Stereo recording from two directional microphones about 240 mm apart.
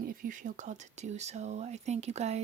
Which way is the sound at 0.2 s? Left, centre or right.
Right.